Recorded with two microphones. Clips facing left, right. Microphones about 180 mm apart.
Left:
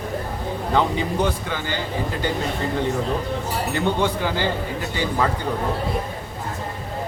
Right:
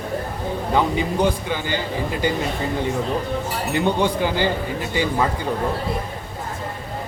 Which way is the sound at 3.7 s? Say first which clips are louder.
Right 3 dB; 15° right (ahead or behind).